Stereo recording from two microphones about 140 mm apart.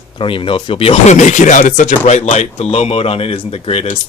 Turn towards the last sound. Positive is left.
turn(degrees=45)  # may be behind; listen again after turning